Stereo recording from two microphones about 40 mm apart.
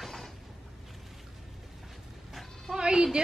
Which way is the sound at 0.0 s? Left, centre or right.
Centre.